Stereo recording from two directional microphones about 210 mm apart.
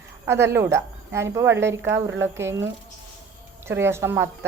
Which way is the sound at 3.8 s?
10° right (ahead or behind).